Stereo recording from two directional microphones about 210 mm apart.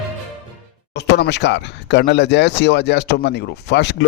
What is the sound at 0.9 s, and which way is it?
Speech, 55° left (ahead or behind).